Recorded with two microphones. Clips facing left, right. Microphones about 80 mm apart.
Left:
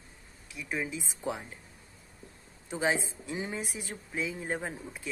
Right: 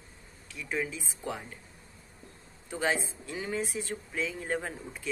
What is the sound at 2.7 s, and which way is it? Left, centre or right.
Speech, centre.